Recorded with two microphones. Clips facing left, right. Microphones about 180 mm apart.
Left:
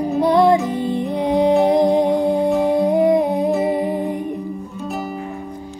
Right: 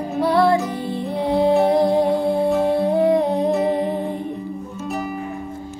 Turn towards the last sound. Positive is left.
turn(degrees=0)  # may be behind; listen again after turning